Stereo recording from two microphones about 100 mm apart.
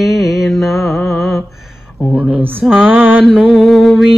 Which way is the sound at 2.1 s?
20° right (ahead or behind).